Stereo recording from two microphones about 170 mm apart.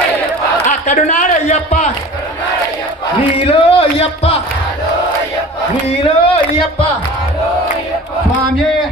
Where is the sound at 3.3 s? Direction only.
35° left (ahead or behind).